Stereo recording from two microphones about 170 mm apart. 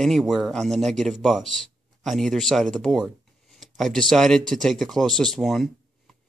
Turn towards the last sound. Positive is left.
turn(degrees=0)  # may be behind; listen again after turning